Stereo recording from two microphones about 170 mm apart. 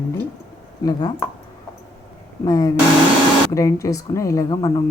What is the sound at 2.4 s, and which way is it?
Speech, 20° left (ahead or behind).